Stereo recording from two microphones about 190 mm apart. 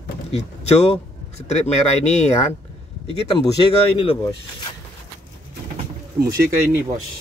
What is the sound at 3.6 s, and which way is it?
Speech, 30° left (ahead or behind).